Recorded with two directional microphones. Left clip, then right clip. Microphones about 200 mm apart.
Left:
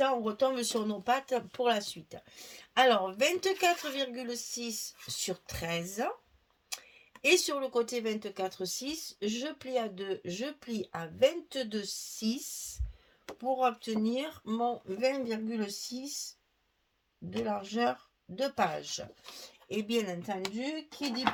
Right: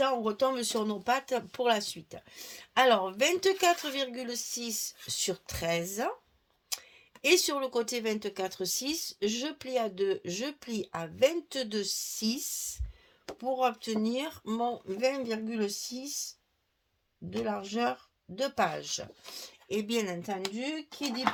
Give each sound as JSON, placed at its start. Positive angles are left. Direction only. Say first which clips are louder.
{"t": 0.0, "sound": "speech", "louder": "right 1 dB", "side_deg": -35}
{"t": 6.7, "sound": "a sound", "louder": "right 4 dB", "side_deg": -35}
{"t": 7.2, "sound": "speech", "louder": "right 1 dB", "side_deg": -40}
{"t": 17.4, "sound": "speech", "louder": "even", "side_deg": -35}